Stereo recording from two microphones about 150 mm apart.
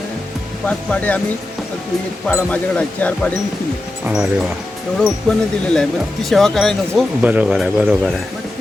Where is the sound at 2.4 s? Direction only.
10° left (ahead or behind).